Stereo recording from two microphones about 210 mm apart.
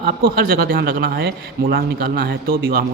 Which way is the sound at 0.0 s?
50° right (ahead or behind).